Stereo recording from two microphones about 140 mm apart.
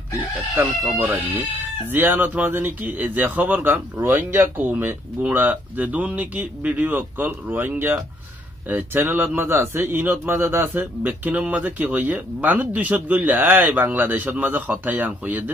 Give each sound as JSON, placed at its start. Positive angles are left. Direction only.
{"t": 0.6, "sound": "speech", "side_deg": -15}